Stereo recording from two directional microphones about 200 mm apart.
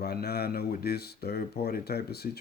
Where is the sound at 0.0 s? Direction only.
50° left (ahead or behind).